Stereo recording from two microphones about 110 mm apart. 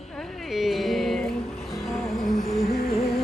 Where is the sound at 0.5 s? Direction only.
Centre (ahead or behind).